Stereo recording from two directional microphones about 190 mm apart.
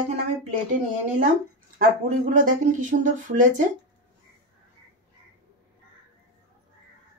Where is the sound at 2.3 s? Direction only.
45° right (ahead or behind).